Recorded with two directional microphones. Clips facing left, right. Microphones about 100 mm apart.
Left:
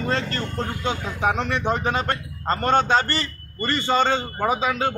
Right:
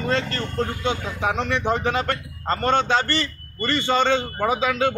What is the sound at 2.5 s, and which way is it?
A man's voice, 35° left (ahead or behind).